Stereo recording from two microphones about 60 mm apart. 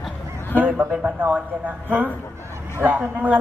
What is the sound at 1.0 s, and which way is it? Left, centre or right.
A man's voice, right.